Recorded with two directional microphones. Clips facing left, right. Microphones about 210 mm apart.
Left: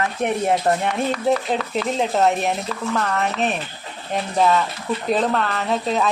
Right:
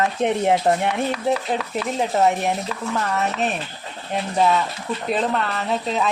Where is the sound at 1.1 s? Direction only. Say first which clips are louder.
Left 2 dB; 5° right (ahead or behind).